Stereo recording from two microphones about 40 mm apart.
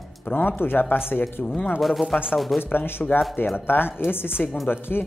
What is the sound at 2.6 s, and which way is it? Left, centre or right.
Speech, left.